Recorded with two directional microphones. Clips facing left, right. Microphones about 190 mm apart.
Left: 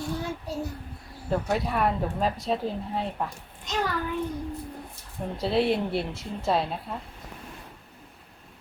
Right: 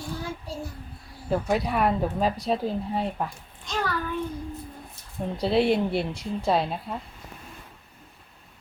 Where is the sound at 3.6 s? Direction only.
20° left (ahead or behind).